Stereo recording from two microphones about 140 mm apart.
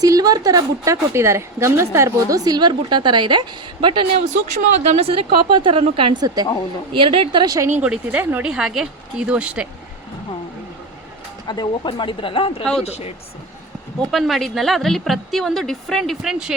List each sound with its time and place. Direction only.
0.0 s a woman's voice: 25° right (ahead or behind)
4.2 s a woman's voice: 55° right (ahead or behind); by 7.4 s 40° right (ahead or behind)
7.4 s a woman's voice: 25° right (ahead or behind)
7.8 s speech: 10° right (ahead or behind)
11.4 s speech: 35° left (ahead or behind); by 13.1 s 50° left (ahead or behind)
14.1 s a woman's voice: centre (ahead or behind)